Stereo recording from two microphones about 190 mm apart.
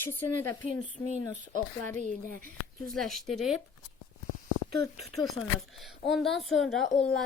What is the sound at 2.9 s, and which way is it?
Speech, centre (ahead or behind).